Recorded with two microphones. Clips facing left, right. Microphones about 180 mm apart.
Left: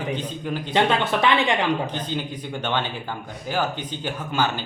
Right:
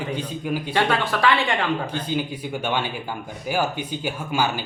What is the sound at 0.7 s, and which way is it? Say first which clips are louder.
Speech: left 3 dB; 20° left (ahead or behind).